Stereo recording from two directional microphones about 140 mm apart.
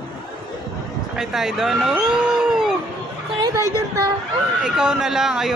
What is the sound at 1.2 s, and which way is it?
Speech, 5° right (ahead or behind).